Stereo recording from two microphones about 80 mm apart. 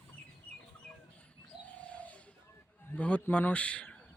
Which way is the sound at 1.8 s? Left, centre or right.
Centre.